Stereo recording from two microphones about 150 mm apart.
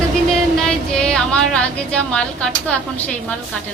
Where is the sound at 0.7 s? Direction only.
5° left (ahead or behind).